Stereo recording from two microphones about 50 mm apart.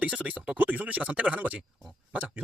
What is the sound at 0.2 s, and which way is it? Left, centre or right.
Speech, right.